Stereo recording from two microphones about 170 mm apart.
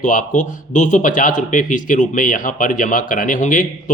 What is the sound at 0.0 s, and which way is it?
Speech, 50° left (ahead or behind).